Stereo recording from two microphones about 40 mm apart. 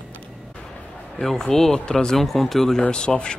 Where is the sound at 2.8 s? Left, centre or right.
Left.